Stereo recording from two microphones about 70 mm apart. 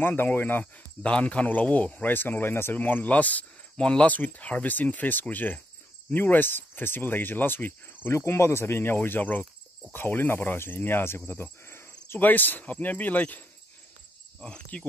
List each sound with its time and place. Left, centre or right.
0.0 s speech: left
8.1 s speech: left
11.6 s cricket: left
12.2 s speech: left
14.4 s cricket: centre